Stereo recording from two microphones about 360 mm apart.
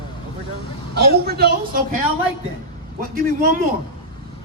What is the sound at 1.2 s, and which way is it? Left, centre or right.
Speech, right.